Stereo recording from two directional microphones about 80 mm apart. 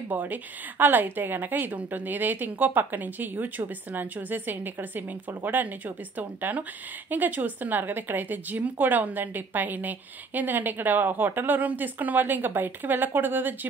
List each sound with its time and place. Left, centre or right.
0.1 s a woman's voice: right